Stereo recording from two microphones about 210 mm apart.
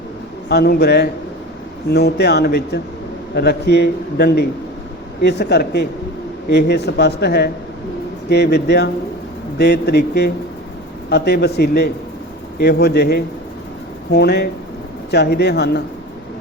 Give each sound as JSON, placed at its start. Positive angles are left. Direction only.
{"t": 0.4, "sound": "a man's voice", "side_deg": 50}